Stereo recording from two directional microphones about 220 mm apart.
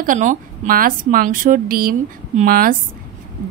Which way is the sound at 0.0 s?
35° right (ahead or behind).